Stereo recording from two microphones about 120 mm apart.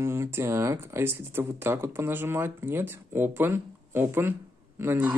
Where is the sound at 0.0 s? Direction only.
20° right (ahead or behind).